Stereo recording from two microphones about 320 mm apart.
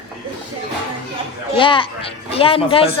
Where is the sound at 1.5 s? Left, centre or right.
Centre.